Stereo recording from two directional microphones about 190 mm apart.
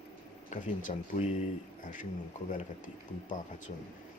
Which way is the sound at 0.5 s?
40° left (ahead or behind).